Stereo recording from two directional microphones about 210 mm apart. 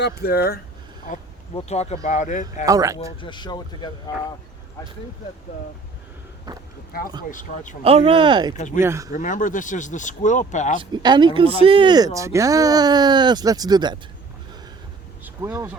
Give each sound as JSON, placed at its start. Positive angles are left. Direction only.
{"t": 0.0, "sound": "speech", "side_deg": 50}
{"t": 2.6, "sound": "speech", "side_deg": -15}
{"t": 3.0, "sound": "speech", "side_deg": 25}
{"t": 6.5, "sound": "speech", "side_deg": -20}
{"t": 7.3, "sound": "speech", "side_deg": 40}
{"t": 7.9, "sound": "speech", "side_deg": -25}
{"t": 8.5, "sound": "speech", "side_deg": 35}
{"t": 8.8, "sound": "speech", "side_deg": -10}
{"t": 9.1, "sound": "speech", "side_deg": 40}
{"t": 10.9, "sound": "speech", "side_deg": -20}
{"t": 15.2, "sound": "a sound", "side_deg": -15}